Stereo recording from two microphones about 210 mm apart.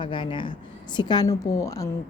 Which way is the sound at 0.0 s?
25° left (ahead or behind).